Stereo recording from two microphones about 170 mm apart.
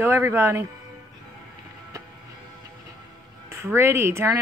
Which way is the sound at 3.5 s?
15° right (ahead or behind).